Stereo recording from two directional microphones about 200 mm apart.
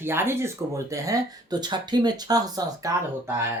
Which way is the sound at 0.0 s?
10° right (ahead or behind).